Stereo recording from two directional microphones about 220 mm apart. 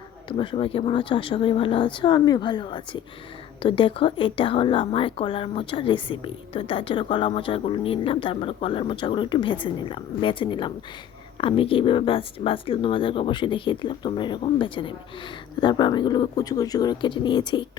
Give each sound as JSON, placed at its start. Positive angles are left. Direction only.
{"t": 0.3, "sound": "a woman's voice", "side_deg": 25}